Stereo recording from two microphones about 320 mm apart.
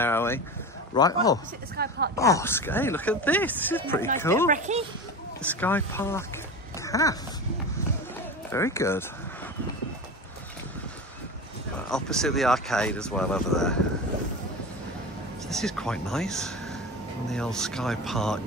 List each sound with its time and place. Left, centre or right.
0.0 s a sound: centre
0.9 s speech: centre
1.8 s speech: right
2.1 s speech: centre
4.5 s speech: right
5.4 s speech: centre
8.5 s speech: centre
11.9 s speech: centre
15.4 s speech: centre